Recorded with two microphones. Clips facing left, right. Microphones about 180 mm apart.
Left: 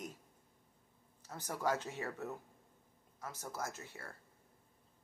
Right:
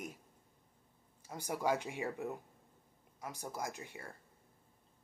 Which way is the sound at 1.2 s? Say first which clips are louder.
Right 2 dB; 10° right (ahead or behind).